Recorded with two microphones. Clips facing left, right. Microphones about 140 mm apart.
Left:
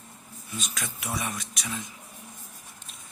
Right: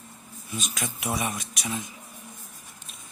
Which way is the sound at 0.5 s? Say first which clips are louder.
Right 3 dB; 15° right (ahead or behind).